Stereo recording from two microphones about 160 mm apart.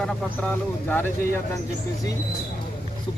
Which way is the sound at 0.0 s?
5° left (ahead or behind).